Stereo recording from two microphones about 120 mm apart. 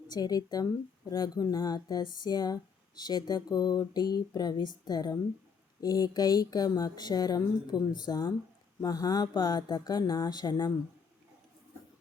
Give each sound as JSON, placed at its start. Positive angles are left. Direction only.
{"t": 0.1, "sound": "speech", "side_deg": 35}